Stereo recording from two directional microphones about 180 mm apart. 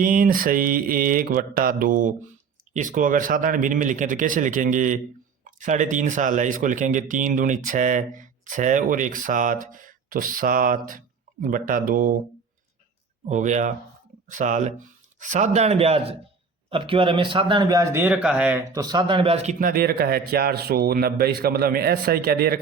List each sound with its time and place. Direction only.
0.0 s speech: 50° right (ahead or behind)
13.2 s speech: 45° right (ahead or behind); by 18.6 s 5° right (ahead or behind)
18.7 s a man's voice: 20° right (ahead or behind); by 22.5 s 55° right (ahead or behind)